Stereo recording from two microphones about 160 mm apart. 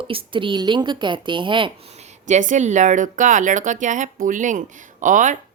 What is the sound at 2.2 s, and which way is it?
Speech, 50° right (ahead or behind).